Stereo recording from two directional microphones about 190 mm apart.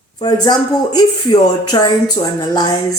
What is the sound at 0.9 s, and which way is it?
Speech, 20° left (ahead or behind).